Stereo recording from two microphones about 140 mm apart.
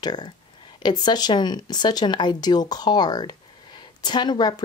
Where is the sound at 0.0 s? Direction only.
30° left (ahead or behind).